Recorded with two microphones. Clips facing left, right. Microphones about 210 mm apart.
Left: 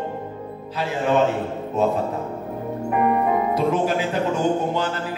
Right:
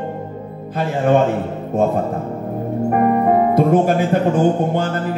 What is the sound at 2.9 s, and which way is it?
Speech, 45° right (ahead or behind).